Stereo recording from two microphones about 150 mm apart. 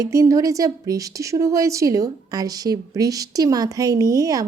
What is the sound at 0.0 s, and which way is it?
A woman's voice, 20° right (ahead or behind).